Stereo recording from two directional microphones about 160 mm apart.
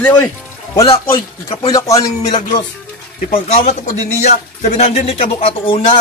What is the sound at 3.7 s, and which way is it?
A man's voice, 45° left (ahead or behind).